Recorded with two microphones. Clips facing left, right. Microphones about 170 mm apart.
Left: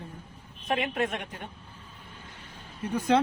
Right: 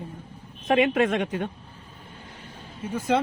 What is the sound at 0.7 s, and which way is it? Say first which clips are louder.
Speech: right 8 dB; 90° right.